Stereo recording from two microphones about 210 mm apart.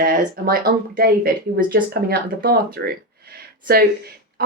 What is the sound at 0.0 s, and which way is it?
Speech, 40° right (ahead or behind).